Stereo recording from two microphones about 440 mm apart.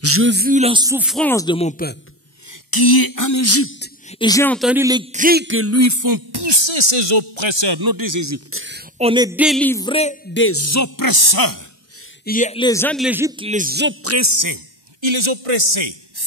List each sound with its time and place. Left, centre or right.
0.0 s speech: right; by 2.0 s centre
2.7 s a sound: left
4.1 s a man's voice: centre
10.3 s speech: left
12.3 s a man's voice: centre; by 14.6 s right
15.0 s a man's voice: right